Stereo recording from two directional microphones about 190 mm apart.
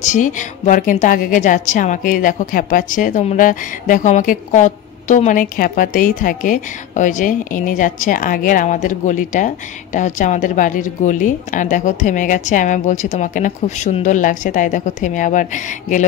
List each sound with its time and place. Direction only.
0.0 s a woman's voice: 40° left (ahead or behind)